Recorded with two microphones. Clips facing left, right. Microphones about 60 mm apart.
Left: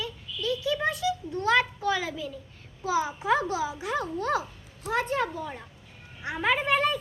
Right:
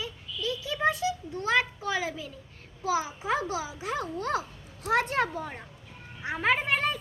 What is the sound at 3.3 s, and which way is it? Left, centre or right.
Speech, left.